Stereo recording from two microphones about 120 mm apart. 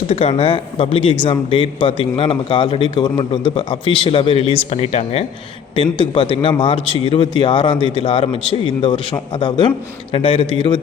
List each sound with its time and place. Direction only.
0.1 s a man's voice: 55° left (ahead or behind)
5.7 s a man's voice: 45° left (ahead or behind)